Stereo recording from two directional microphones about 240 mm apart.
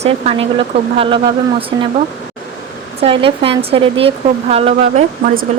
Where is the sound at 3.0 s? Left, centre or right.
Right.